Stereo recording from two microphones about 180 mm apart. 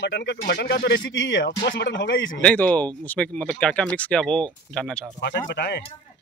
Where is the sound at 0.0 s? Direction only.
75° left (ahead or behind).